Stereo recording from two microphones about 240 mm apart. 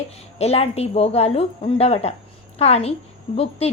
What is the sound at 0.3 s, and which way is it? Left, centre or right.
A woman's voice, left.